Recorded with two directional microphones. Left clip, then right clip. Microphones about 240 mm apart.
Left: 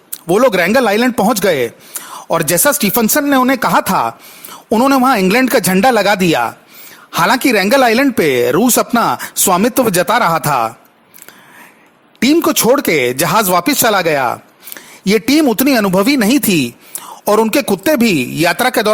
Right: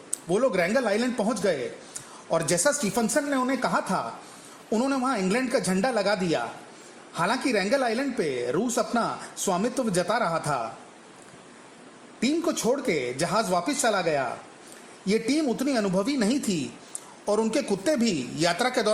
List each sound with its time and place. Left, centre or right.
0.3 s a man's voice: left
12.2 s a man's voice: left